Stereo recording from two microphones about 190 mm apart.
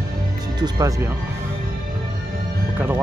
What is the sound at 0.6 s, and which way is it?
Speech, 20° right (ahead or behind).